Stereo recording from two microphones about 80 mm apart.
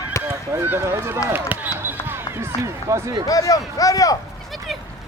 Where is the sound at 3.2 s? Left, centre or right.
Left.